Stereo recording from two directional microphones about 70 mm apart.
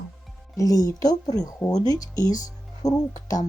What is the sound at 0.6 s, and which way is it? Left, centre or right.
Speech, left.